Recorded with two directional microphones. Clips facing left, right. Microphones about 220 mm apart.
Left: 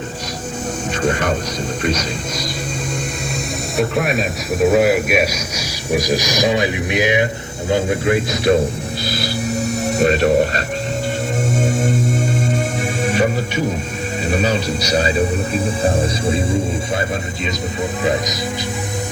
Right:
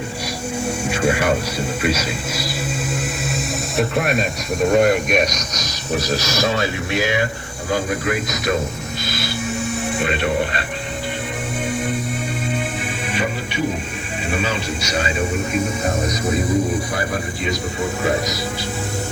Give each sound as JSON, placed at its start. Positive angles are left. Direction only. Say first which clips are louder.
{"t": 0.9, "sound": "music", "louder": "even", "side_deg": -10}
{"t": 1.8, "sound": "speech", "louder": "left 1 dB", "side_deg": -5}
{"t": 3.8, "sound": "a man's voice", "louder": "left 1 dB", "side_deg": 0}
{"t": 11.5, "sound": "music", "louder": "left 3 dB", "side_deg": 45}
{"t": 14.3, "sound": "a man's voice", "louder": "left 4 dB", "side_deg": 40}